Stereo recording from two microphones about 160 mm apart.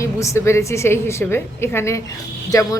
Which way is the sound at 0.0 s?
20° left (ahead or behind).